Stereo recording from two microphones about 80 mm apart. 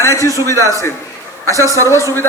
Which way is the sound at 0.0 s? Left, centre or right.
Left.